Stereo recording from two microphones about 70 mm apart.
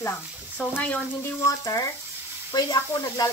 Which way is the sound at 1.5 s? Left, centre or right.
Left.